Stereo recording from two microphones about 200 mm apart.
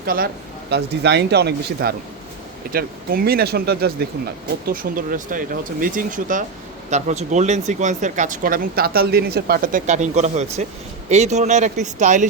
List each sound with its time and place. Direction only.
0.0 s speech: 45° right (ahead or behind)